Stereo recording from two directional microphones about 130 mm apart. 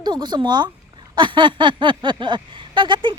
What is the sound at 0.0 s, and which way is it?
Speech, 35° right (ahead or behind).